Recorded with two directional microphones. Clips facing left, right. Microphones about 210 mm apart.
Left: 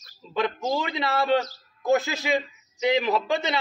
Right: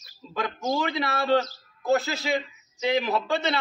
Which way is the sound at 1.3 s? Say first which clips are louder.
Even; 15° left (ahead or behind).